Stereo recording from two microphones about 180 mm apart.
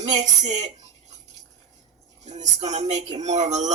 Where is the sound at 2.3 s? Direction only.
40° right (ahead or behind).